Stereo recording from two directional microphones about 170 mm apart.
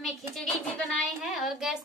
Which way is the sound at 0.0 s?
Centre (ahead or behind).